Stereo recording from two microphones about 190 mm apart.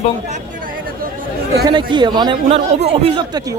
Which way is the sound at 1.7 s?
25° right (ahead or behind).